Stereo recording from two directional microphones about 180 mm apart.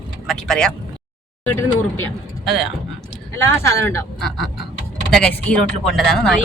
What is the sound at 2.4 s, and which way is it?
Speech, centre (ahead or behind).